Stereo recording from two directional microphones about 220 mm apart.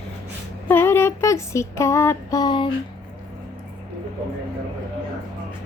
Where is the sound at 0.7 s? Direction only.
10° left (ahead or behind).